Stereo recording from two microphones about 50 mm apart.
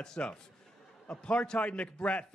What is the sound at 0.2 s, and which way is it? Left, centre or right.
A man's voice, left.